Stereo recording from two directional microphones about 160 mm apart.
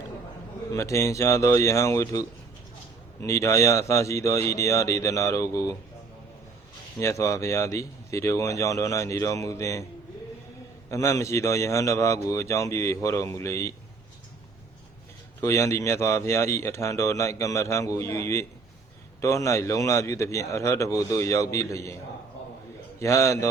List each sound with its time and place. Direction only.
0.7 s speech: 20° left (ahead or behind)
7.0 s speech: 20° left (ahead or behind)
10.8 s speech: 20° left (ahead or behind)
15.4 s speech: 20° left (ahead or behind)
23.0 s speech: 20° left (ahead or behind)